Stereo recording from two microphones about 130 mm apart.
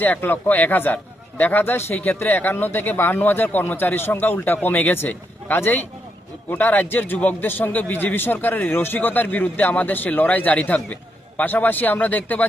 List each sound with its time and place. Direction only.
0.0 s speech: 15° left (ahead or behind)